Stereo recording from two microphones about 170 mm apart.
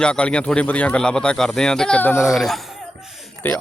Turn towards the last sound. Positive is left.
turn(degrees=10)  # may be behind; listen again after turning